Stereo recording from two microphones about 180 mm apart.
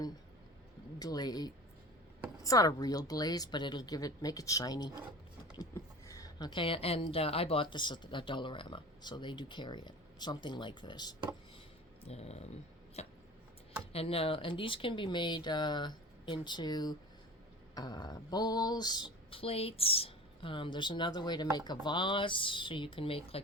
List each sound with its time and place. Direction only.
0.9 s a woman's voice: 20° left (ahead or behind)
6.1 s a woman's voice: 20° left (ahead or behind)
12.0 s speech: 35° left (ahead or behind)
13.0 s a sound: 35° left (ahead or behind)
13.9 s a woman's voice: 35° left (ahead or behind)